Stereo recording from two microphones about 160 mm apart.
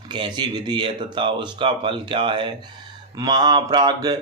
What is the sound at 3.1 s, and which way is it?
Mantra, 25° right (ahead or behind).